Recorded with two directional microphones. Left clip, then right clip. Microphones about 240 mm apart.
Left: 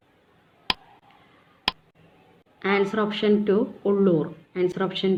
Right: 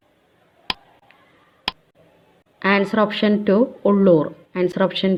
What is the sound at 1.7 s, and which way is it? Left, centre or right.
Tick, centre.